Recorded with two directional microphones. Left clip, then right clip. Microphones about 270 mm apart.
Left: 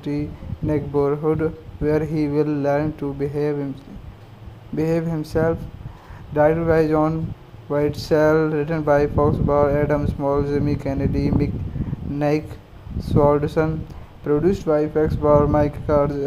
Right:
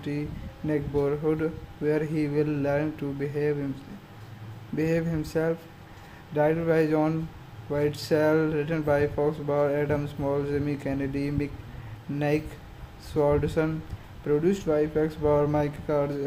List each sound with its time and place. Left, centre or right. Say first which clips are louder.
0.7 s speech: left 6 dB; centre
4.7 s speech: left 5 dB; centre